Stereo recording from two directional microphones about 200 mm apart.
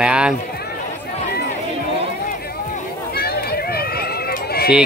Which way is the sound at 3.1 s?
50° left (ahead or behind).